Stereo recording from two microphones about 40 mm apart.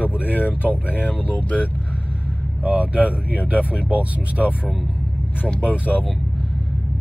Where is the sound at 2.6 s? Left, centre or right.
Right.